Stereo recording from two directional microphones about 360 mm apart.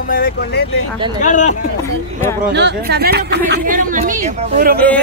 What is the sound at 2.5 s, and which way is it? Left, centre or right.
Speech, right.